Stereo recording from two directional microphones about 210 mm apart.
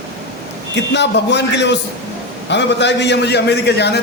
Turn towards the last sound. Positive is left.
turn(degrees=55)  # may be behind; listen again after turning